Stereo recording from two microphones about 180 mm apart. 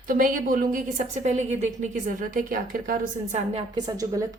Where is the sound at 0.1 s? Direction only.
50° right (ahead or behind).